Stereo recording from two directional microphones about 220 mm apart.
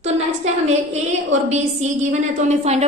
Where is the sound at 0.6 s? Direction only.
30° right (ahead or behind).